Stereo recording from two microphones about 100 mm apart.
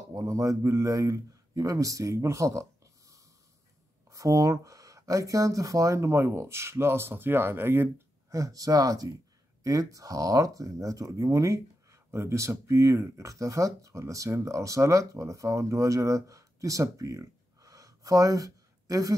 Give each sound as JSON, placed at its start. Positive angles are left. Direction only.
{"t": 0.1, "sound": "speech", "side_deg": -35}